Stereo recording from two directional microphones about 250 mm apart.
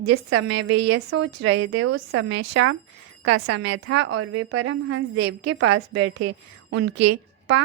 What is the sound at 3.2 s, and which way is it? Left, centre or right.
Speech, right.